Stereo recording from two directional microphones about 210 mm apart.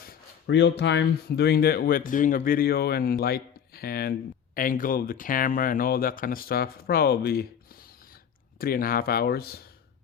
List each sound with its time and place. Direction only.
0.0 s speech: 50° left (ahead or behind)
8.5 s speech: 45° left (ahead or behind)